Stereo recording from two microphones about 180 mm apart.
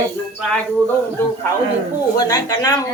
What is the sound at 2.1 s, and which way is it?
Speech, 20° left (ahead or behind).